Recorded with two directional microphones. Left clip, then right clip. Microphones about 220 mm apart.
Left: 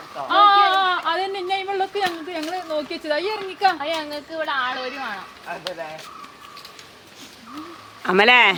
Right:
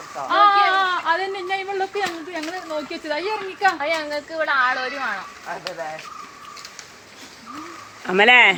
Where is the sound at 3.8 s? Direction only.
25° right (ahead or behind).